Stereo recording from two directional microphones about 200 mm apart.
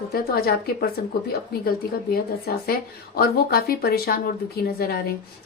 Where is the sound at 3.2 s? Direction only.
50° left (ahead or behind).